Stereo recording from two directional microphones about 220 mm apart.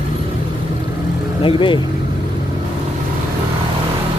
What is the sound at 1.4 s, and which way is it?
Speech, 25° left (ahead or behind).